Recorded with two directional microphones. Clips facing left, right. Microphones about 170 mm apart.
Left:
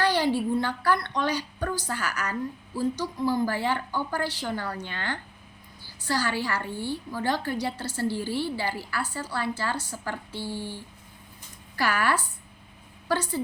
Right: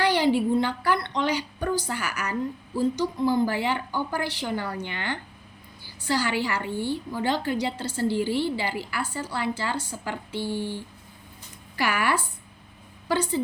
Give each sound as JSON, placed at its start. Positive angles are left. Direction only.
{"t": 0.0, "sound": "a woman's voice", "side_deg": -15}
{"t": 11.8, "sound": "a woman's voice", "side_deg": -15}